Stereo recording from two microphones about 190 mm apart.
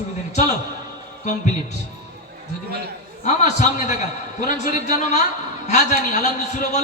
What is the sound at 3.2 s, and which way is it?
A man's voice, 40° left (ahead or behind).